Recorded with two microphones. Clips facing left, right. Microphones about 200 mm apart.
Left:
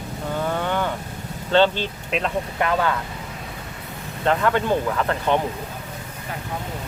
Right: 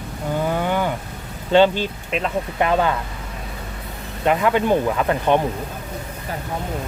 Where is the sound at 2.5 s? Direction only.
20° right (ahead or behind).